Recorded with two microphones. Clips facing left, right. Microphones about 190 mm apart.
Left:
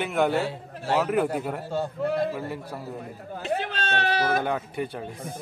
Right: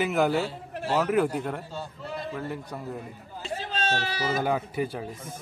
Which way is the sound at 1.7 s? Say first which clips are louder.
Left 10 dB; 55° left (ahead or behind).